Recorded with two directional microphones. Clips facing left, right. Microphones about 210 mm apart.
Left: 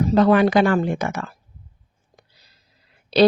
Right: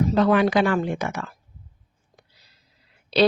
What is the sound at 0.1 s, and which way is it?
A woman's voice, 45° left (ahead or behind).